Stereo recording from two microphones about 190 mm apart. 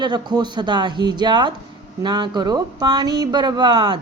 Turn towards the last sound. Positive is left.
turn(degrees=-25)  # may be behind; listen again after turning